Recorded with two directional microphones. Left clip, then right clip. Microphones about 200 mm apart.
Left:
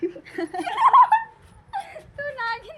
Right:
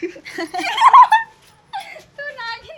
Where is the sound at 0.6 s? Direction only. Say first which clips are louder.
Right 6 dB; 15° left (ahead or behind).